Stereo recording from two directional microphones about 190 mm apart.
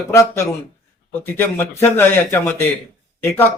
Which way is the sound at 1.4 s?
10° left (ahead or behind).